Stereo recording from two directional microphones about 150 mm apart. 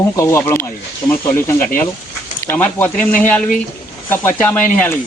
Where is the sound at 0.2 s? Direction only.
15° left (ahead or behind).